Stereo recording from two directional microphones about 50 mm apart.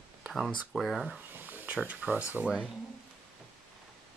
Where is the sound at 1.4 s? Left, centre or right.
Right.